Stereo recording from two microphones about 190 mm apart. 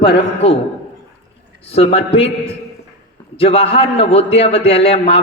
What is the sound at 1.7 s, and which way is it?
A man's voice, 30° left (ahead or behind).